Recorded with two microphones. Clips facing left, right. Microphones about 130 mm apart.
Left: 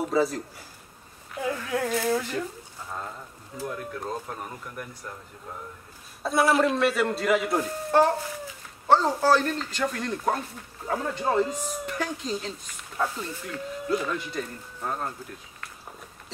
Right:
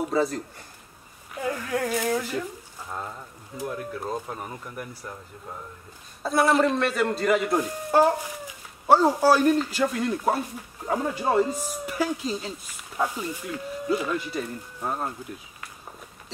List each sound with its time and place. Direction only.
0.0 s speech: centre (ahead or behind)
3.6 s speech: 5° right (ahead or behind)
6.2 s speech: centre (ahead or behind)
7.5 s speech: 10° right (ahead or behind)